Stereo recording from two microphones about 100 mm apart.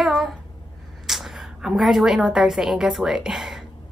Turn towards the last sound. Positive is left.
turn(degrees=-5)  # may be behind; listen again after turning